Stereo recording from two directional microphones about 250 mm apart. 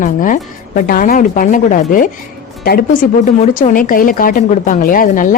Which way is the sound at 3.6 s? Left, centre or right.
Left.